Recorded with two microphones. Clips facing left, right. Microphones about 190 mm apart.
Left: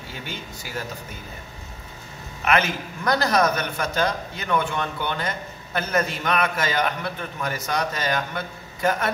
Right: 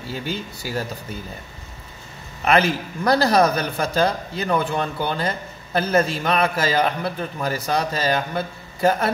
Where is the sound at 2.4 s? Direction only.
35° right (ahead or behind).